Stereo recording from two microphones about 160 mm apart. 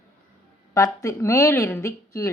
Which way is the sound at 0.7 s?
20° left (ahead or behind).